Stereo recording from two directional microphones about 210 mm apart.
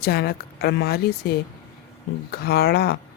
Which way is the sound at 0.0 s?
50° left (ahead or behind).